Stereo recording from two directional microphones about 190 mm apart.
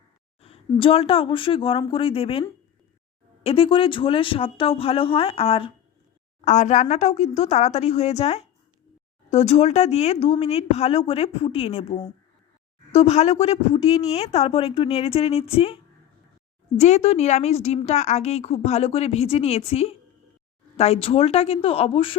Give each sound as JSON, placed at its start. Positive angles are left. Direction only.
{"t": 0.7, "sound": "speech", "side_deg": 30}
{"t": 3.4, "sound": "a woman's voice", "side_deg": 30}